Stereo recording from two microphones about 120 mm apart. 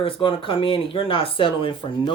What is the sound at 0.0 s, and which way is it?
Speech, 50° left (ahead or behind).